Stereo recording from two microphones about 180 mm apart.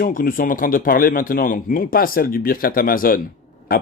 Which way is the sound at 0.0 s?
50° left (ahead or behind).